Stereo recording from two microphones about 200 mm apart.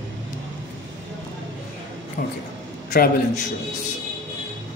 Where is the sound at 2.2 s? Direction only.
45° left (ahead or behind).